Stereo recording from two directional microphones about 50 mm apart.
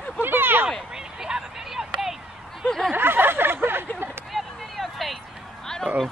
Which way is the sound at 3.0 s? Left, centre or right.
Right.